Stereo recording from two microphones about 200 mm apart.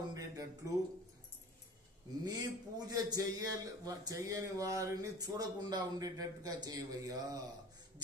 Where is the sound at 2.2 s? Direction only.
20° right (ahead or behind).